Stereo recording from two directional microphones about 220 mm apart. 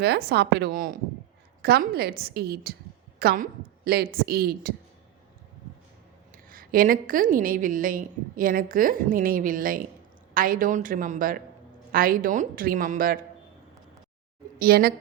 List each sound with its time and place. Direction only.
0.0 s a woman's voice: 45° right (ahead or behind)
6.5 s a woman's voice: 40° right (ahead or behind)
14.6 s a woman's voice: 45° right (ahead or behind)